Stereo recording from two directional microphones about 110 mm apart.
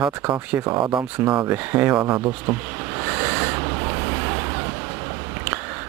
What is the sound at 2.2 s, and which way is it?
Rub, 15° right (ahead or behind).